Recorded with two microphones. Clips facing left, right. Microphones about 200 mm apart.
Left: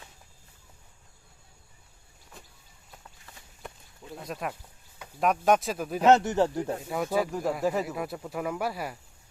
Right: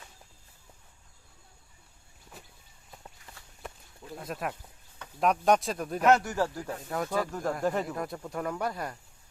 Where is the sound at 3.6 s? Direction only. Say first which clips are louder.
Even; centre (ahead or behind).